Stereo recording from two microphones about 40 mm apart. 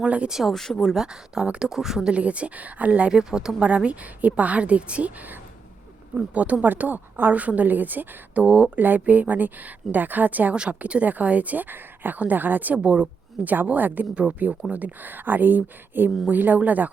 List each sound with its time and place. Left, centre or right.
0.0 s speech: right
0.3 s speech: centre
0.5 s speech: centre
0.9 s speech: centre
2.0 s a woman's voice: right
3.1 s speech: centre
3.8 s a woman's voice: right
6.1 s a woman's voice: right
6.6 s speech: right
8.4 s a woman's voice: right
10.7 s a woman's voice: right